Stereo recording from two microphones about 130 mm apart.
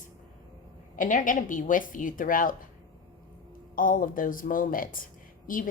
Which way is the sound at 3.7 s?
90° left.